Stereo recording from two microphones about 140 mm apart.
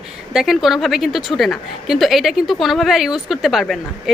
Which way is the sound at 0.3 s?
Centre (ahead or behind).